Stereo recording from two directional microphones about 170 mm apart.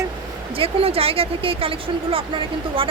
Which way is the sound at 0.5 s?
35° right (ahead or behind).